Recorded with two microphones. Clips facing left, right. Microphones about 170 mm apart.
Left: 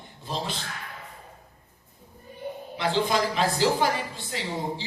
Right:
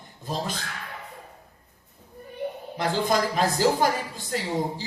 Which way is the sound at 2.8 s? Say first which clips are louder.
Right 1 dB; 45° right (ahead or behind).